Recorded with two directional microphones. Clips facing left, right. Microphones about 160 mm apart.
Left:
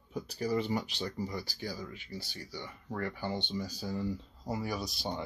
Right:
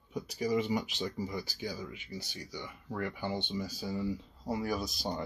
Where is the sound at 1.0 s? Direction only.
10° right (ahead or behind).